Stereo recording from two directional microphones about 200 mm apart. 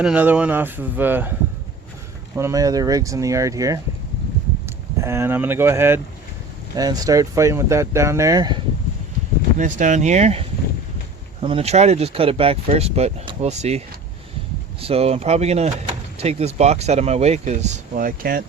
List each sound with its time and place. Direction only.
0.0 s speech: 5° right (ahead or behind)
2.3 s speech: 15° right (ahead or behind)
4.9 s speech: 15° right (ahead or behind)
9.6 s speech: 40° right (ahead or behind)
11.4 s speech: 30° right (ahead or behind); by 18.4 s 45° right (ahead or behind)